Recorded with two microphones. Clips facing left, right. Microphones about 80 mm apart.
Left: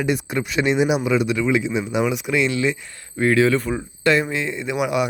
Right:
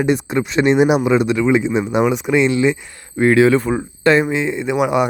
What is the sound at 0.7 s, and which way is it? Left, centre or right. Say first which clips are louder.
Speech: right 6 dB; right.